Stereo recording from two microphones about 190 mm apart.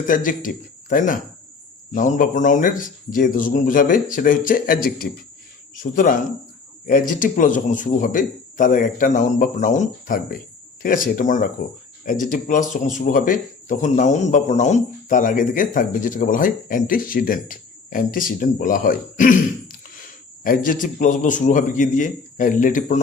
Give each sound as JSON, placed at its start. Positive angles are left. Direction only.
{"t": 0.1, "sound": "speech", "side_deg": 45}
{"t": 7.2, "sound": "speech", "side_deg": 45}